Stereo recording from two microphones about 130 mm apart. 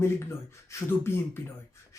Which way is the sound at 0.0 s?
20° left (ahead or behind).